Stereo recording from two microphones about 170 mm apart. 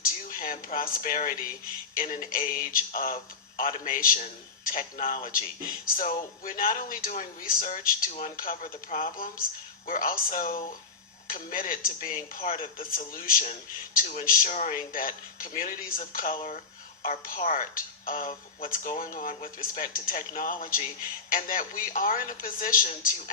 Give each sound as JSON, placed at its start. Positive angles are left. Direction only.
{"t": 0.0, "sound": "speech", "side_deg": 55}